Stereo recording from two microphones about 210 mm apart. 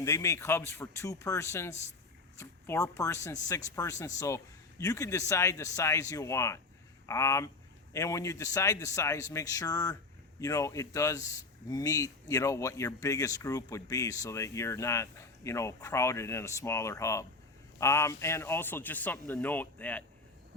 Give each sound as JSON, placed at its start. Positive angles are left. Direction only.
{"t": 0.0, "sound": "speech", "side_deg": 15}